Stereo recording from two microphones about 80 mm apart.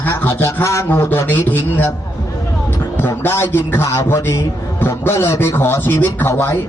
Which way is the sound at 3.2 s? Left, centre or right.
Left.